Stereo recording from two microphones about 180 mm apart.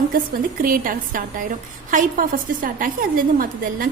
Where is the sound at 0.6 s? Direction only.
50° right (ahead or behind).